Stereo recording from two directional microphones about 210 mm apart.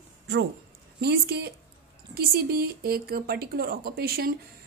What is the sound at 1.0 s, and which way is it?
A woman's voice, 50° right (ahead or behind).